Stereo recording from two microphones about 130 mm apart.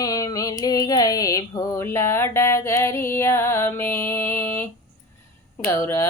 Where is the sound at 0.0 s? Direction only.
30° left (ahead or behind).